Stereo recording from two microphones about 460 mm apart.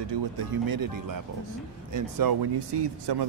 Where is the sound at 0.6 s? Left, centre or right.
Right.